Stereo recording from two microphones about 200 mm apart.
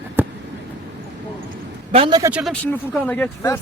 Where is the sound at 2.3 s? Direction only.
Centre (ahead or behind).